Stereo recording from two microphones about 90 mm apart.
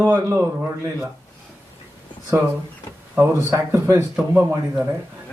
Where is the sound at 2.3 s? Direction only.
30° right (ahead or behind).